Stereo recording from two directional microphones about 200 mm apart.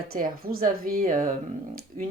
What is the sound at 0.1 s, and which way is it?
Speech, 45° right (ahead or behind).